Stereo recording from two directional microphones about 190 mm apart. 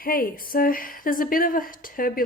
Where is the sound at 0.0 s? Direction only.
50° left (ahead or behind).